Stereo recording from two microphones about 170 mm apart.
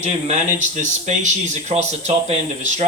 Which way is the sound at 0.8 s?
45° right (ahead or behind).